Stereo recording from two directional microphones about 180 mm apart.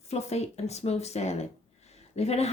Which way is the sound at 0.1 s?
35° left (ahead or behind).